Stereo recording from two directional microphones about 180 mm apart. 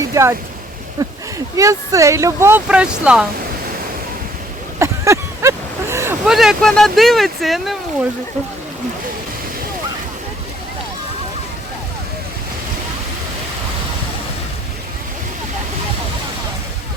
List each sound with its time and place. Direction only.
0.1 s speech: 15° right (ahead or behind)
4.8 s a sound: 15° right (ahead or behind)
6.2 s speech: centre (ahead or behind)